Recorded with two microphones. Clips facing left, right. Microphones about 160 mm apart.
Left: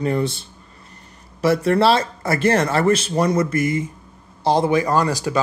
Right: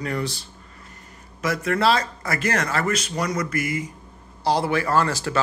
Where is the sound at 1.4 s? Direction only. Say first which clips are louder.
Left 6 dB; 30° left (ahead or behind).